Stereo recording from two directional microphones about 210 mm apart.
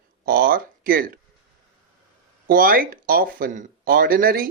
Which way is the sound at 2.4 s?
45° right (ahead or behind).